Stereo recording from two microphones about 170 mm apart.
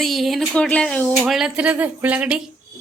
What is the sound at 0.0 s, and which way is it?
Speech, centre (ahead or behind).